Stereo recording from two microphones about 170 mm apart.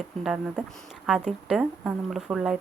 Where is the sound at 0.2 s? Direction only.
5° right (ahead or behind).